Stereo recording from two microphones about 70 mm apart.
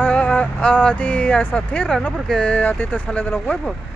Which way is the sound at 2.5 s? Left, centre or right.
Left.